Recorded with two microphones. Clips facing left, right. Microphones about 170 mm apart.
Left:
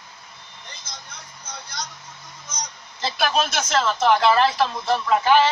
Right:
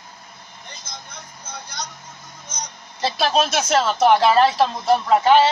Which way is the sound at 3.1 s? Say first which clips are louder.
Right 3 dB; 30° right (ahead or behind).